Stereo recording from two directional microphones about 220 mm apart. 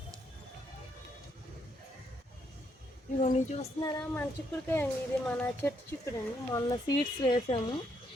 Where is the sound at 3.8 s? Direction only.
15° left (ahead or behind).